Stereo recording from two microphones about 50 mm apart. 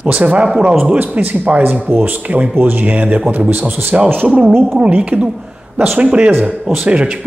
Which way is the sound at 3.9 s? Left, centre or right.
Right.